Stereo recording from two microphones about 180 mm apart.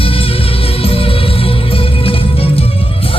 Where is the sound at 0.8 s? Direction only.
30° left (ahead or behind).